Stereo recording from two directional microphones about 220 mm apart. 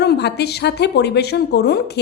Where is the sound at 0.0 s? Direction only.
50° left (ahead or behind).